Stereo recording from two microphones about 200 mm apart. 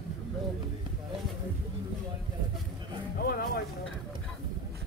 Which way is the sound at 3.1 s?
50° left (ahead or behind).